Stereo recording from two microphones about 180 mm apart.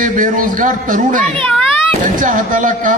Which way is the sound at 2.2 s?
45° right (ahead or behind).